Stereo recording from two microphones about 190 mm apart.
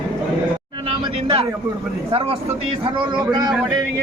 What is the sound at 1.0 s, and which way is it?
A man's voice, 30° right (ahead or behind).